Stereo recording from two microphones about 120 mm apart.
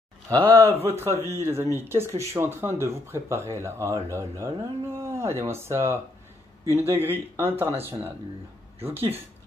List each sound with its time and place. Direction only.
0.3 s speech: 25° right (ahead or behind)
8.8 s speech: 20° right (ahead or behind)